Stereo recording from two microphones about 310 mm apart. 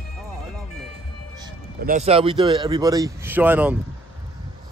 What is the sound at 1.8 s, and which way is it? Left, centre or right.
Speech, right.